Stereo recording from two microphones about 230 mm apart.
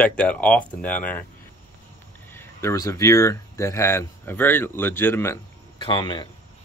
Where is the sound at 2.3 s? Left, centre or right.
Centre.